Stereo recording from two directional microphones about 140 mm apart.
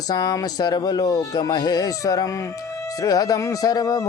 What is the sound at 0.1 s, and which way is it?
Music, 25° left (ahead or behind).